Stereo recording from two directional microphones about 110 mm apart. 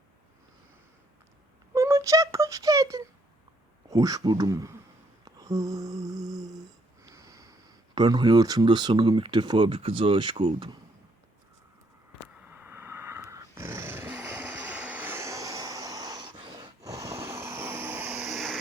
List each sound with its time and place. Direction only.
1.7 s a sound: 30° right (ahead or behind)
3.8 s speech: 35° right (ahead or behind)
5.2 s a sound: 30° right (ahead or behind)
7.9 s speech: 40° right (ahead or behind)
12.5 s snoring: 20° right (ahead or behind); by 16.3 s 35° right (ahead or behind)
16.5 s vehicle: 35° right (ahead or behind)
18.3 s vehicle: centre (ahead or behind)